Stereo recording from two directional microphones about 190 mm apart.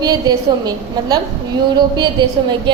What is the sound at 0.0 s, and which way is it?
A woman's voice, 20° right (ahead or behind).